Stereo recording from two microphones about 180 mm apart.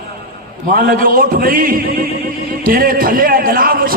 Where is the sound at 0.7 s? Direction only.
50° right (ahead or behind).